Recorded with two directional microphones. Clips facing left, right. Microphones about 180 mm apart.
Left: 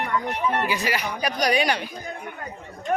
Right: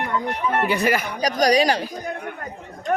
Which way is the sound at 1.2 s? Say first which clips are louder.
Right 5 dB; 40° right (ahead or behind).